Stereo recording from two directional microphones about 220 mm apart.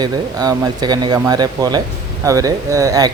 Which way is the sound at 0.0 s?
15° right (ahead or behind).